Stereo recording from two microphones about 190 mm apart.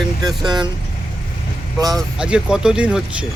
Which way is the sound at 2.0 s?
5° right (ahead or behind).